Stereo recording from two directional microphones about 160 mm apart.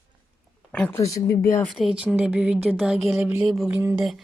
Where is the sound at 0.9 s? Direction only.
20° left (ahead or behind).